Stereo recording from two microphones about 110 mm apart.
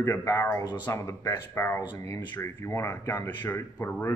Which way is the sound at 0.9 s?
25° left (ahead or behind).